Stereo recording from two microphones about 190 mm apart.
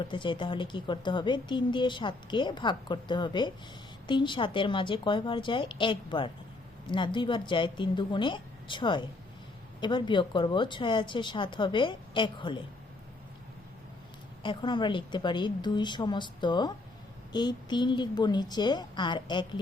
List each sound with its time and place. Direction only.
0.0 s speech: 25° left (ahead or behind)
14.4 s speech: 25° left (ahead or behind)